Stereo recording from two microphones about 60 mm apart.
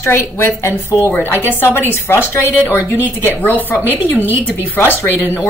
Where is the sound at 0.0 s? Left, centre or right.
Left.